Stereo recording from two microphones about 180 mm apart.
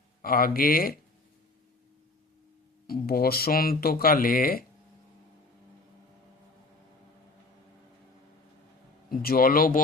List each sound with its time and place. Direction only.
0.2 s speech: 50° left (ahead or behind)
2.8 s speech: 55° left (ahead or behind)
9.0 s speech: 55° left (ahead or behind)